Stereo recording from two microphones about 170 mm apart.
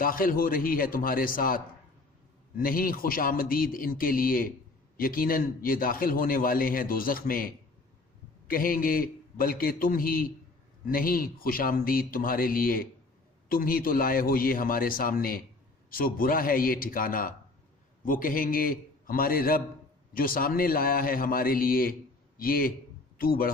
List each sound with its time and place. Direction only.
0.0 s a man's voice: 55° left (ahead or behind)